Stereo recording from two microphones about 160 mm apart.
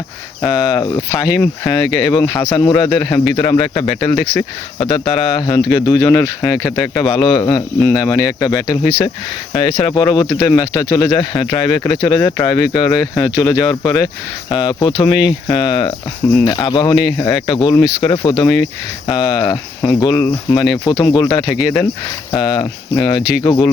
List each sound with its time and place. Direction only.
0.4 s speech: 25° left (ahead or behind)